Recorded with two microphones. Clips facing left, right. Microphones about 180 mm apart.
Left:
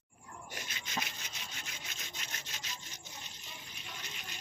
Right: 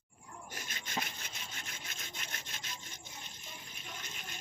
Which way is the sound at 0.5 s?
45° right (ahead or behind).